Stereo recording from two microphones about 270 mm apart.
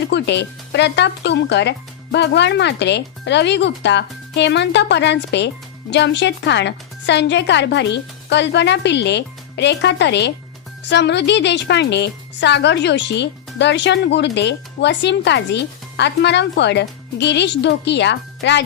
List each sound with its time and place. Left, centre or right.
0.1 s speech: left